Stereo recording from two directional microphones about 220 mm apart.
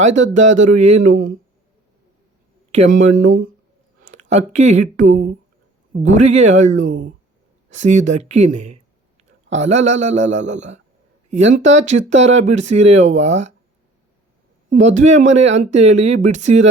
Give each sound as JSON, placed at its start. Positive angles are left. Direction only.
{"t": 0.0, "sound": "speech", "side_deg": -35}
{"t": 2.7, "sound": "speech", "side_deg": -35}
{"t": 14.7, "sound": "speech", "side_deg": -35}